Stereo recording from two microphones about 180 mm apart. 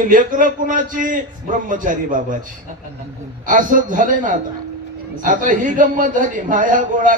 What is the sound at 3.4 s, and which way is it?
A man's voice, 45° right (ahead or behind).